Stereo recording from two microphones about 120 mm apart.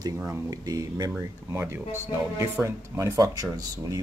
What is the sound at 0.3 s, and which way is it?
Speech, 30° right (ahead or behind).